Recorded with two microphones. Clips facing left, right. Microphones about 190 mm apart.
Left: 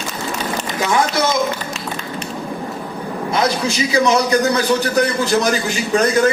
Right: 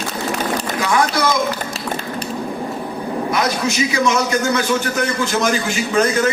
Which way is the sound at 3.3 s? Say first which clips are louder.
Left 3 dB; 30° left (ahead or behind).